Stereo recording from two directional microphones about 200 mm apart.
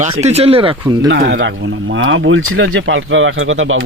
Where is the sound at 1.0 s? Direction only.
70° right (ahead or behind).